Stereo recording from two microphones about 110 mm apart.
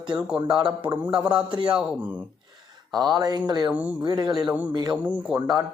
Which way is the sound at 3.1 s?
35° right (ahead or behind).